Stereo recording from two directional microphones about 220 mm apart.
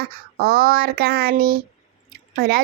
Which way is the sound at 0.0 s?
45° right (ahead or behind).